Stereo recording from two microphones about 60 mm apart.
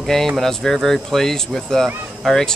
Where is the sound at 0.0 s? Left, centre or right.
Centre.